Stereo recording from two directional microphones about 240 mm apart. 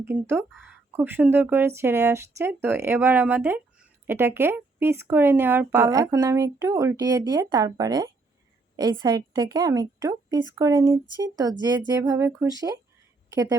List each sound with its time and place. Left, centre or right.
0.0 s a woman's voice: centre